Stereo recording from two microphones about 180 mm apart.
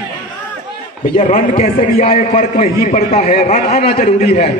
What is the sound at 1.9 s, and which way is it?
A man's voice, 40° left (ahead or behind).